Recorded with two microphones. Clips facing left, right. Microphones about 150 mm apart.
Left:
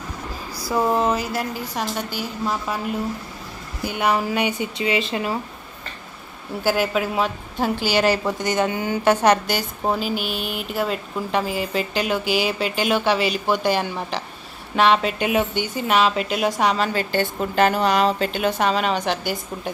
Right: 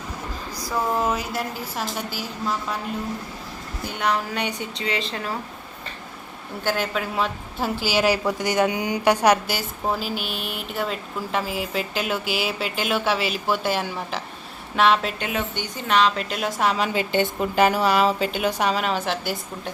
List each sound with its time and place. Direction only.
0.7 s speech: 20° left (ahead or behind)
1.1 s speech: centre (ahead or behind)
3.8 s a woman's voice: 10° left (ahead or behind)
6.6 s speech: 10° left (ahead or behind)
15.2 s a woman's voice: 15° left (ahead or behind)
16.8 s a woman's voice: 15° right (ahead or behind); by 19.7 s centre (ahead or behind)